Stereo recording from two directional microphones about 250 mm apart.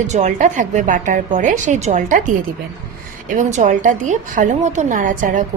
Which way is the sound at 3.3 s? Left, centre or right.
Right.